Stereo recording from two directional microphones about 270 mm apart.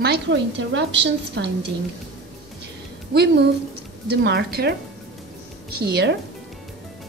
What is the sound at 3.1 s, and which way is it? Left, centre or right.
A woman's voice, right.